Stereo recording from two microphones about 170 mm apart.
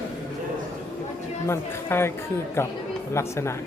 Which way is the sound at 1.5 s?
15° left (ahead or behind).